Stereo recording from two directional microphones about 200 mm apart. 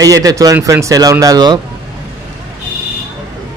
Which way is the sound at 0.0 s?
15° right (ahead or behind).